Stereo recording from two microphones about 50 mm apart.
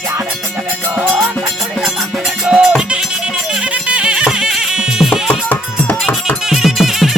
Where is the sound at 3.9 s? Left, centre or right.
Right.